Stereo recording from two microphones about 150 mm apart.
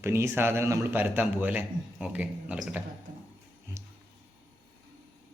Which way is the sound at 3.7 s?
20° right (ahead or behind).